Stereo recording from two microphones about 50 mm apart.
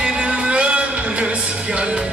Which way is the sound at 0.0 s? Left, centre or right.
Centre.